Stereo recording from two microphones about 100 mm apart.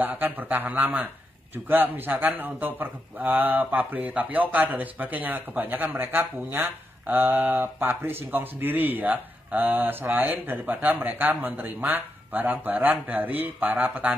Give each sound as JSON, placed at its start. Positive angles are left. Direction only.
{"t": 0.0, "sound": "a man's voice", "side_deg": -20}